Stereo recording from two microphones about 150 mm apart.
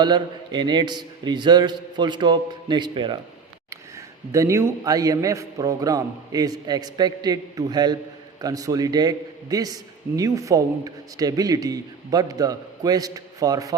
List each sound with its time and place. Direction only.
0.0 s a man's voice: 30° right (ahead or behind)
3.7 s a man's voice: 20° right (ahead or behind)